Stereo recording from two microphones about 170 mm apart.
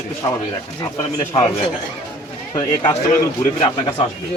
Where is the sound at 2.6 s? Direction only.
25° left (ahead or behind).